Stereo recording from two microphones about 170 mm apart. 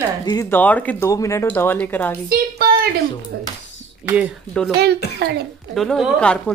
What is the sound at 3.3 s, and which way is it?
Speech, 80° right.